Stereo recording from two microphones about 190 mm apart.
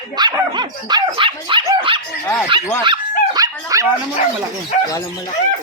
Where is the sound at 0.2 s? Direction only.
20° right (ahead or behind).